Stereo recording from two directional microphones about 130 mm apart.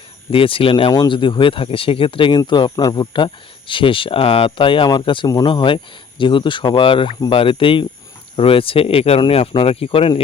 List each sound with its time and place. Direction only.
0.3 s speech: 45° left (ahead or behind)